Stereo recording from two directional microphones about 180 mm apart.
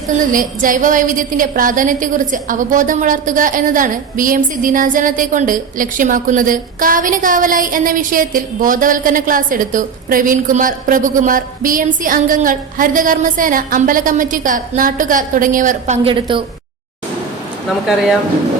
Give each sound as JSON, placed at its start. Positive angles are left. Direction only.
{"t": 0.3, "sound": "a woman's voice", "side_deg": -50}
{"t": 16.0, "sound": "a woman's voice", "side_deg": -30}